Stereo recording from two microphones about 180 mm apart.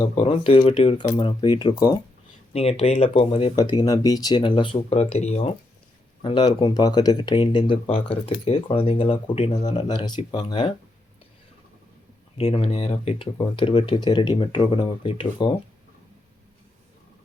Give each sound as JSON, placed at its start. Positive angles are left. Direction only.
{"t": 0.2, "sound": "speech", "side_deg": 30}
{"t": 2.5, "sound": "speech", "side_deg": 35}
{"t": 12.4, "sound": "speech", "side_deg": 35}